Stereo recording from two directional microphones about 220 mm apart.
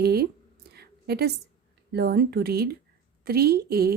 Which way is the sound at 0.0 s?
45° right (ahead or behind).